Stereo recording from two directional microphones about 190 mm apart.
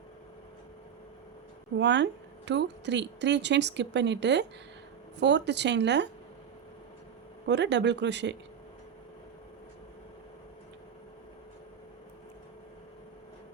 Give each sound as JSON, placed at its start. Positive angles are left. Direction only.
{"t": 1.8, "sound": "speech", "side_deg": -65}
{"t": 7.4, "sound": "speech", "side_deg": -65}